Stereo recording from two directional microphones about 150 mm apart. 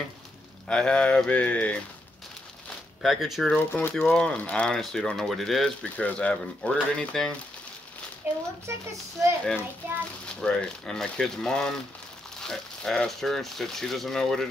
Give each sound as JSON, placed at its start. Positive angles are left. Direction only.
{"t": 0.7, "sound": "speech", "side_deg": 5}
{"t": 3.0, "sound": "speech", "side_deg": 0}
{"t": 3.5, "sound": "speech", "side_deg": 10}
{"t": 8.2, "sound": "a child's voice", "side_deg": -15}
{"t": 10.2, "sound": "speech", "side_deg": 5}